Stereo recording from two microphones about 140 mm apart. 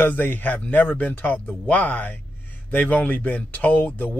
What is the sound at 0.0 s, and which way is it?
Speech, 15° left (ahead or behind).